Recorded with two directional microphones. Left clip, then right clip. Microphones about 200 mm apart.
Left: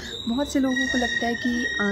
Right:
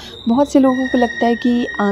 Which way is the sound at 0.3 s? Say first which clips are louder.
Right 11 dB; 25° right (ahead or behind).